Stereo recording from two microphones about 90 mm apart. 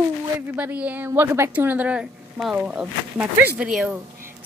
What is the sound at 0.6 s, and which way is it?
A woman's voice, 15° right (ahead or behind).